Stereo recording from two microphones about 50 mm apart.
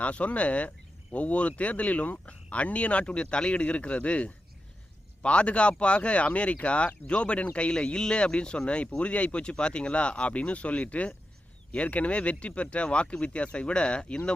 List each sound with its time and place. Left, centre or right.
0.0 s speech: left